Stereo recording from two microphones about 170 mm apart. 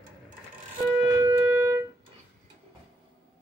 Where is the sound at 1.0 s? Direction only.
20° right (ahead or behind).